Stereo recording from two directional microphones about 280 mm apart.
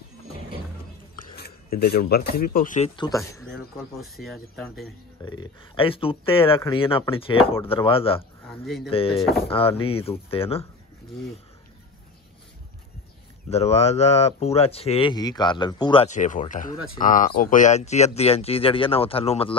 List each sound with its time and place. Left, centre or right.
1.1 s speech: left
3.0 s speech: centre
4.0 s speech: centre
5.2 s speech: centre
13.5 s speech: left